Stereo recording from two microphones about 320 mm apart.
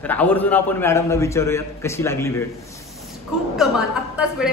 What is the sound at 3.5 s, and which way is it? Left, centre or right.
Speech, centre.